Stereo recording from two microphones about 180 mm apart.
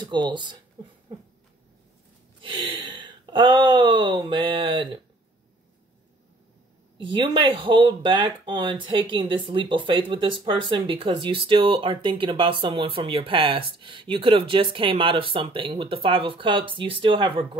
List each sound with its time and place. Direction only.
0.0 s speech: 25° right (ahead or behind)
2.4 s speech: 25° right (ahead or behind)
7.0 s speech: 25° right (ahead or behind)